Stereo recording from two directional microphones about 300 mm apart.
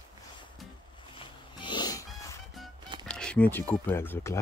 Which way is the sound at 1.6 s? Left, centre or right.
Centre.